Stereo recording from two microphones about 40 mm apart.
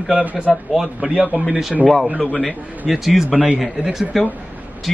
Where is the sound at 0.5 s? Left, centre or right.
Centre.